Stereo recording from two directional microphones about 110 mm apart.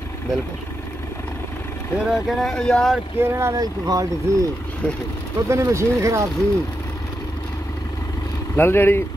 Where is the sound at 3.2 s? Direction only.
25° right (ahead or behind).